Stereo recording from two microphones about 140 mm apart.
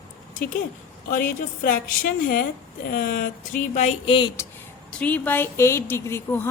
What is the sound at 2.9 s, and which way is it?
Speech, 75° left (ahead or behind).